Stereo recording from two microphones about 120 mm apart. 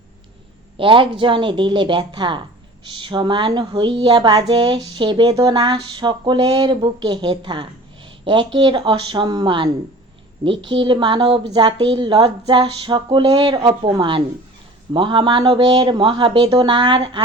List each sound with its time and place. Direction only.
0.8 s speech: 45° right (ahead or behind)